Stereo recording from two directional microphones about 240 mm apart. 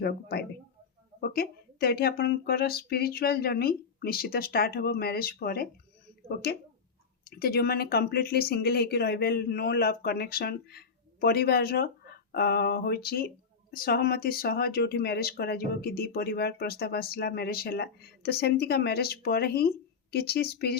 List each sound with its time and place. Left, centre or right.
0.0 s speech: left